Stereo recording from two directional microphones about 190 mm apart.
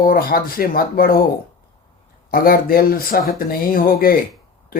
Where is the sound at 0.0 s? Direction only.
50° left (ahead or behind).